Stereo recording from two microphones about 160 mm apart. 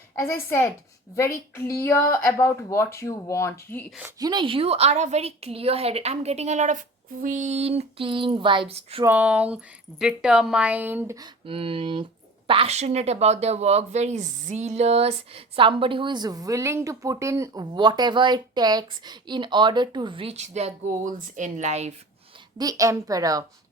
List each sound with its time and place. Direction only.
0.2 s speech: 15° left (ahead or behind)
4.2 s speech: 25° right (ahead or behind)
9.0 s a woman's voice: 10° right (ahead or behind)
11.4 s speech: 35° right (ahead or behind)
22.5 s a woman's voice: 20° right (ahead or behind)